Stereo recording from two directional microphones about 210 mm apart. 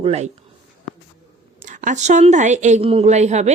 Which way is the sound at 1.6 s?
35° right (ahead or behind).